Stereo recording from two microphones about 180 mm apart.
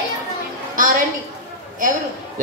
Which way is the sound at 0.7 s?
45° right (ahead or behind).